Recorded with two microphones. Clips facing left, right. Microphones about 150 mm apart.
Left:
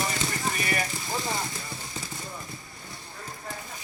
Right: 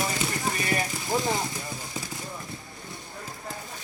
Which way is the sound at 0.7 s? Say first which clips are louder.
Right 3 dB; 20° right (ahead or behind).